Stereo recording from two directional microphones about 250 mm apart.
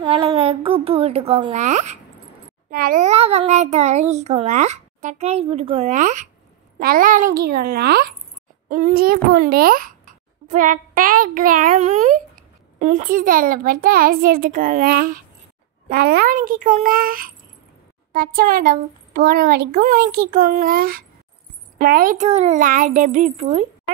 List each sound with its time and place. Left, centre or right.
0.0 s a child's voice: right